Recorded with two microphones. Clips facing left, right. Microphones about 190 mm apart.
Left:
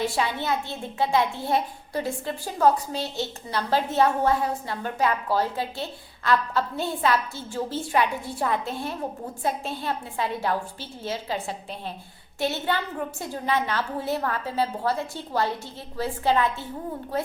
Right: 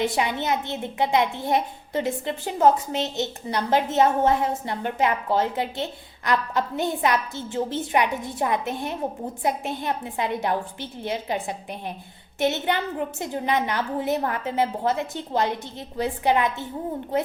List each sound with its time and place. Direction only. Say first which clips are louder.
0.0 s a woman's voice: right 2 dB; 20° right (ahead or behind)